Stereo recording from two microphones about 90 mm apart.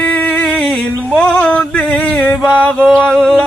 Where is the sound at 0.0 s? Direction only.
20° left (ahead or behind).